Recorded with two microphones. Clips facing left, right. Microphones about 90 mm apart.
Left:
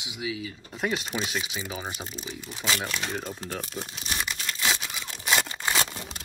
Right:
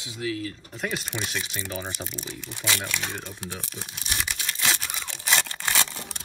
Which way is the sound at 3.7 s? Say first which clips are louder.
Left 3 dB; 30° left (ahead or behind).